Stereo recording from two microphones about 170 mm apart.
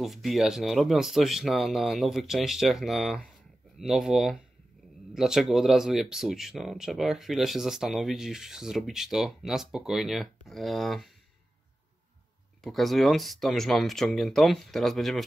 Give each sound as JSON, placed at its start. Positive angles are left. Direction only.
{"t": 0.0, "sound": "speech", "side_deg": 0}
{"t": 12.6, "sound": "speech", "side_deg": 0}